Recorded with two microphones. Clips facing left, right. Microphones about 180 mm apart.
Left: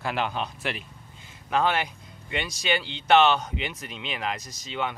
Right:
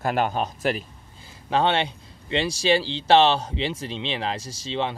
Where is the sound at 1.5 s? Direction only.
30° right (ahead or behind).